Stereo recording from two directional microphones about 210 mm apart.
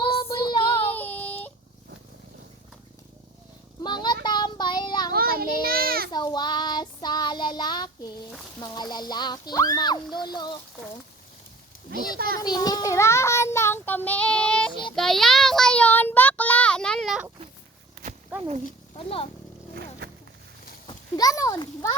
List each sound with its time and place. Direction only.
0.0 s child singing: 25° left (ahead or behind)
0.9 s child singing: 10° left (ahead or behind)
3.8 s child singing: 20° left (ahead or behind)
5.1 s child singing: 45° right (ahead or behind)
6.1 s child singing: 20° left (ahead or behind)
8.6 s speech: 20° left (ahead or behind)
12.4 s a child's voice: 20° left (ahead or behind)
14.9 s child singing: centre (ahead or behind)
18.3 s speech: 35° right (ahead or behind)
18.9 s speech: 25° left (ahead or behind)
19.7 s wild animals: 50° right (ahead or behind)
20.8 s a sound: 20° left (ahead or behind)